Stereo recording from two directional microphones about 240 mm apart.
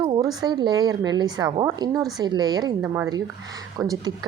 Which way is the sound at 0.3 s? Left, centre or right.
Centre.